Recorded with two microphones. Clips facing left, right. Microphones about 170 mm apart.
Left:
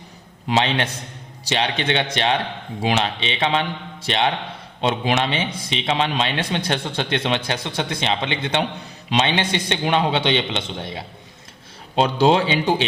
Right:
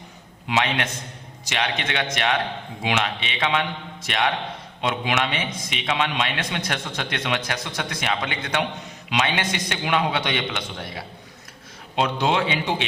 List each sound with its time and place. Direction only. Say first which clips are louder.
0.4 s a man's voice: left 3 dB; 30° left (ahead or behind)